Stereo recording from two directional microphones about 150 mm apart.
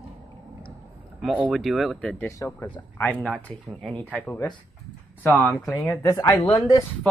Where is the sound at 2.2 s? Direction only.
20° left (ahead or behind).